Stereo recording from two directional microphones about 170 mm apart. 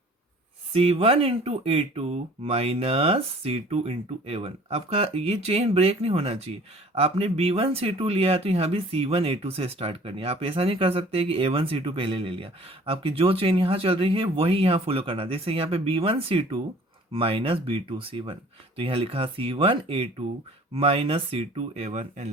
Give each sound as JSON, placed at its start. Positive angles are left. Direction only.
{"t": 0.7, "sound": "speech", "side_deg": -35}